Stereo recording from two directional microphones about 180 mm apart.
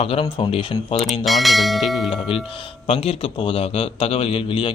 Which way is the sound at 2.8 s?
30° left (ahead or behind).